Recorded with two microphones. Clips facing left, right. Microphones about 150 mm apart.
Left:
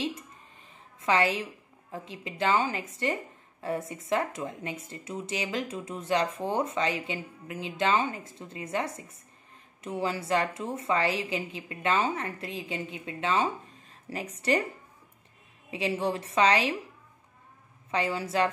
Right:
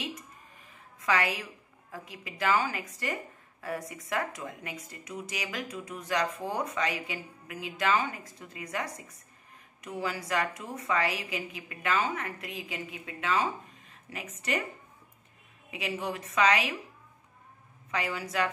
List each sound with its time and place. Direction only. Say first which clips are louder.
1.0 s a woman's voice: left 3 dB; 25° left (ahead or behind)
15.7 s a woman's voice: left 5 dB; 30° left (ahead or behind)
17.9 s a woman's voice: left 4 dB; 30° left (ahead or behind)